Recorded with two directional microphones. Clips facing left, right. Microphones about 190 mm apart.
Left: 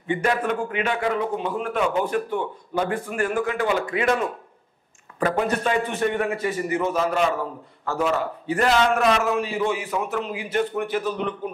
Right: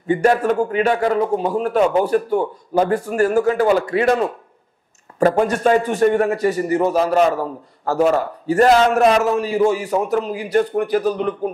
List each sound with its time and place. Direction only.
0.0 s a man's voice: 40° right (ahead or behind)